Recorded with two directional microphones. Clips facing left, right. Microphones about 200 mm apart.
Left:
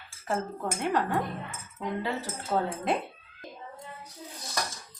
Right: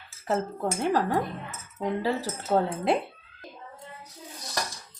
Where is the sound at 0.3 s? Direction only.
35° right (ahead or behind).